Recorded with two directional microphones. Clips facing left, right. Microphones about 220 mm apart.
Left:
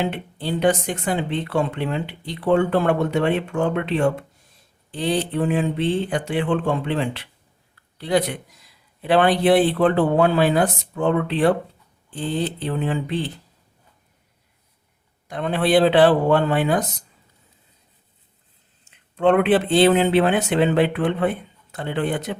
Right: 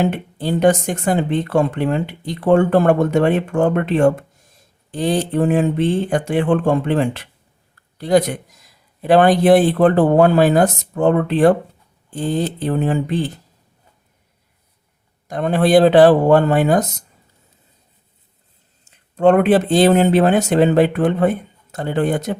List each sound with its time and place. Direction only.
0.0 s speech: 45° right (ahead or behind)
15.3 s speech: 45° right (ahead or behind)
18.9 s speech: 40° right (ahead or behind)